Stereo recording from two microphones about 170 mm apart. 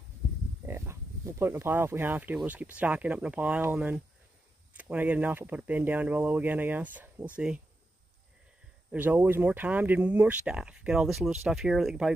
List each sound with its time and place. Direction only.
0.7 s speech: 15° right (ahead or behind)
8.9 s speech: 10° right (ahead or behind)